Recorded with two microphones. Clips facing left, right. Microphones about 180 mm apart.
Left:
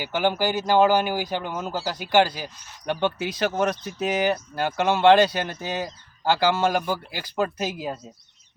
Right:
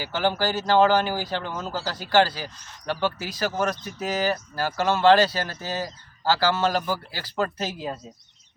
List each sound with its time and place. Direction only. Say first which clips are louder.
0.0 s speech: left 1 dB; 15° left (ahead or behind)